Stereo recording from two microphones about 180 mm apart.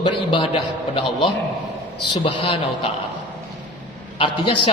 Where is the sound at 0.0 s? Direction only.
25° left (ahead or behind).